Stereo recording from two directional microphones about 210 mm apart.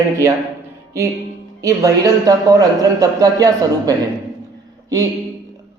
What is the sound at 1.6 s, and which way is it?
Speech, 15° right (ahead or behind).